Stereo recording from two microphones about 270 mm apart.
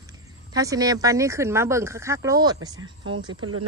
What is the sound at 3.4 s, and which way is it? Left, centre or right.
Speech, right.